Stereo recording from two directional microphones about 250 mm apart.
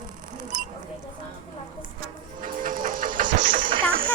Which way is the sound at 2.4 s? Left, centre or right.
Right.